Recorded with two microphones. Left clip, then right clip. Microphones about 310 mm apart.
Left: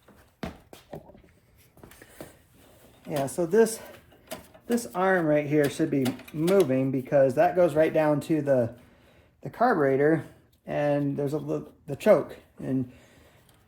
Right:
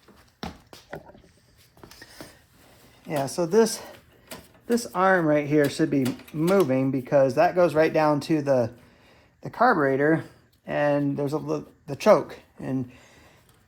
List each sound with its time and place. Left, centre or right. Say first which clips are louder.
0.9 s a sound: right 3 dB; left
3.1 s speech: right 1 dB; right
6.1 s speech: right 1 dB; centre
6.5 s speech: right 1 dB; right